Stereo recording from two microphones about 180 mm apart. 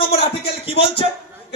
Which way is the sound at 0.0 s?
30° left (ahead or behind).